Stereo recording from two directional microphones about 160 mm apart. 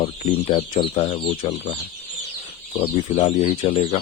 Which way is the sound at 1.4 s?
50° left (ahead or behind).